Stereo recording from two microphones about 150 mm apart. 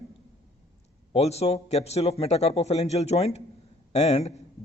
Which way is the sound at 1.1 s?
45° left (ahead or behind).